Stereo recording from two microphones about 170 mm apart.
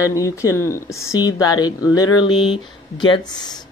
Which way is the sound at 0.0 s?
20° left (ahead or behind).